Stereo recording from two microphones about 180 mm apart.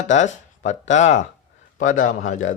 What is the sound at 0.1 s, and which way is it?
Speech, 40° left (ahead or behind).